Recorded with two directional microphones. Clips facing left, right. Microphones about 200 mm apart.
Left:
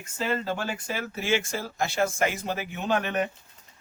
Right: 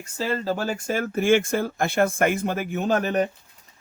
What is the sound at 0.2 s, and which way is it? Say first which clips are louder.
Speech: right 3 dB; 35° right (ahead or behind).